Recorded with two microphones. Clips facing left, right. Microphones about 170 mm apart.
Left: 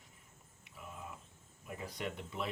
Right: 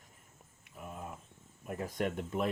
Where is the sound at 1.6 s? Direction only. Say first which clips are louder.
Right 7 dB; 50° right (ahead or behind).